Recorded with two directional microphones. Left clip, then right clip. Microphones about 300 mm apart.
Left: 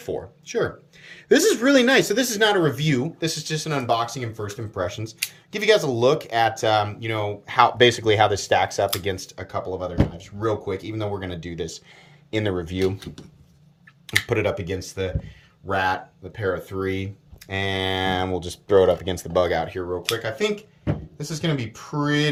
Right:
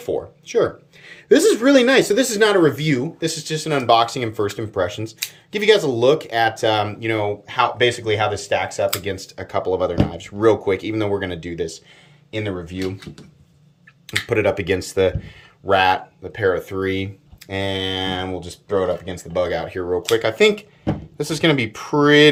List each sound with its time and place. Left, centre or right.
0.0 s speech: centre
12.3 s speech: left
14.3 s speech: centre
21.2 s speech: centre